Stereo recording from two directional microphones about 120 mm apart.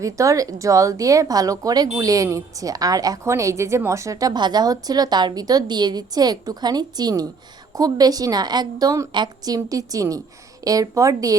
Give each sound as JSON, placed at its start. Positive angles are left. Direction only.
{"t": 0.0, "sound": "speech", "side_deg": -25}